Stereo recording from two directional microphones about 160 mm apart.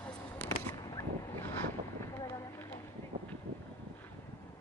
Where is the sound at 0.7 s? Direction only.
25° left (ahead or behind).